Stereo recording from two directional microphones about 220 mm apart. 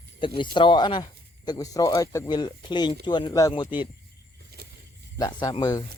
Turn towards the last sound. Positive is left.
turn(degrees=15)  # may be behind; listen again after turning